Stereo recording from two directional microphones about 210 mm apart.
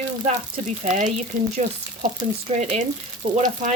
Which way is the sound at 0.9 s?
35° right (ahead or behind).